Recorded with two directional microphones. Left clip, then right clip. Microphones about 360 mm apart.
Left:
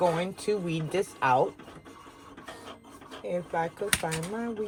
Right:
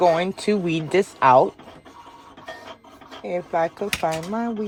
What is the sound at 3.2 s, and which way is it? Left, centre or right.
Speech, right.